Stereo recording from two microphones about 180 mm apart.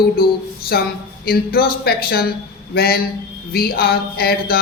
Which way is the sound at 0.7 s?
60° left (ahead or behind).